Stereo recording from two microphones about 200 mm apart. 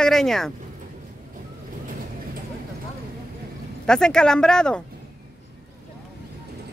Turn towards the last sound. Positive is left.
turn(degrees=5)  # may be behind; listen again after turning